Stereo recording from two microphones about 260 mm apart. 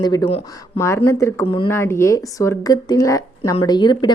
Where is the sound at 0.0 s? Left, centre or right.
Centre.